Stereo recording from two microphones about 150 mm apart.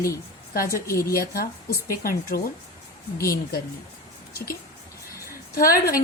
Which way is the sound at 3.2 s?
90° left.